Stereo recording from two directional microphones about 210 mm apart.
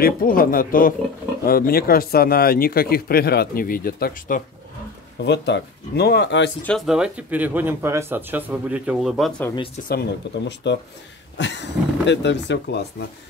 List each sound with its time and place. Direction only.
0.0 s speech: 45° left (ahead or behind)
5.2 s speech: 55° left (ahead or behind)
6.6 s speech: centre (ahead or behind)
9.8 s speech: 50° left (ahead or behind)